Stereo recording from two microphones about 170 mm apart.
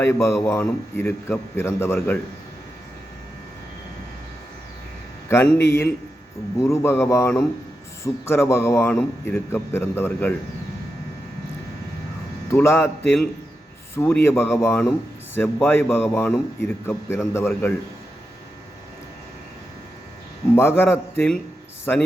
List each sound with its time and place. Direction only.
0.0 s a man's voice: 15° left (ahead or behind)
5.5 s a man's voice: 15° left (ahead or behind)
12.5 s a man's voice: 15° left (ahead or behind)
20.6 s a man's voice: 15° left (ahead or behind)